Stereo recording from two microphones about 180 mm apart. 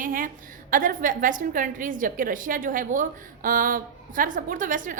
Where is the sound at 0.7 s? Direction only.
50° right (ahead or behind).